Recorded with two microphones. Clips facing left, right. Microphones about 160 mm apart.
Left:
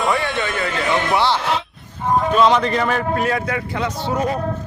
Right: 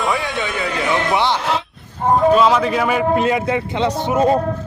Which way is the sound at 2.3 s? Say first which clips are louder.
Right 1 dB; 5° right (ahead or behind).